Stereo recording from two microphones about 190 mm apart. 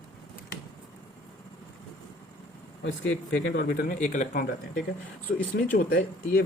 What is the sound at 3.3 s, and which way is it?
Speech, 60° left (ahead or behind).